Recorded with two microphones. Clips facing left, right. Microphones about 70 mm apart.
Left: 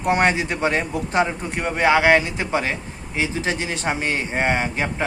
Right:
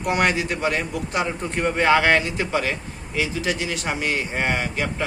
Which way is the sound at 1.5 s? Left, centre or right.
Centre.